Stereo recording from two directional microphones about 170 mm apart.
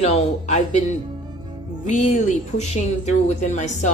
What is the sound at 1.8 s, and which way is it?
Speech, 45° left (ahead or behind).